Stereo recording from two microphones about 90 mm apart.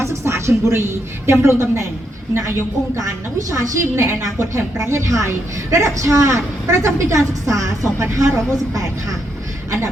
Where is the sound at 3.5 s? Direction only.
30° right (ahead or behind).